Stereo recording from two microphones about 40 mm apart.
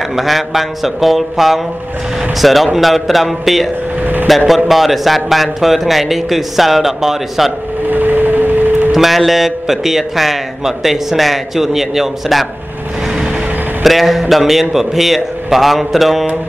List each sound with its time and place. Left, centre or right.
0.1 s speech: centre
4.0 s vehicle: right
4.5 s speech: centre
7.9 s a sound: right
8.9 s speech: centre
13.8 s speech: centre